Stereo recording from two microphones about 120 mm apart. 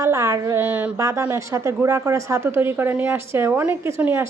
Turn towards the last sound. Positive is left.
turn(degrees=-20)  # may be behind; listen again after turning